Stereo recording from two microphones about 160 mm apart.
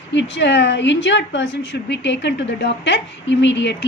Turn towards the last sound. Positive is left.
turn(degrees=90)